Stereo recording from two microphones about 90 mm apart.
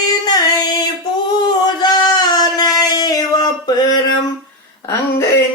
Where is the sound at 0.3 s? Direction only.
45° left (ahead or behind).